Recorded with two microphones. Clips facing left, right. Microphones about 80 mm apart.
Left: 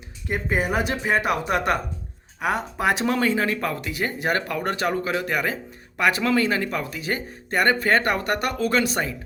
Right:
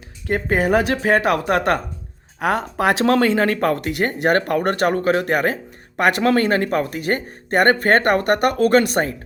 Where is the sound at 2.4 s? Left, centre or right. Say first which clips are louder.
Right 4 dB; right.